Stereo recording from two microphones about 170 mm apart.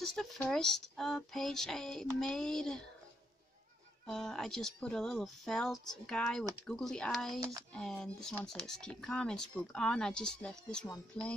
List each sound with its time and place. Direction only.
0.0 s speech: 5° left (ahead or behind)
4.0 s speech: 5° left (ahead or behind)
7.3 s speech: 20° right (ahead or behind)
7.7 s speech: 5° left (ahead or behind)